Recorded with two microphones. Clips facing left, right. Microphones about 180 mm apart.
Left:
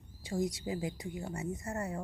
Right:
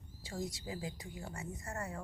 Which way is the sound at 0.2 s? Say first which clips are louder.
Left 7 dB; 20° left (ahead or behind).